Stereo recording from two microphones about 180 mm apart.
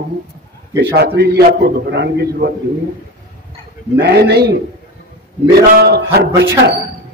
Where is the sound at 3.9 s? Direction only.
65° right (ahead or behind).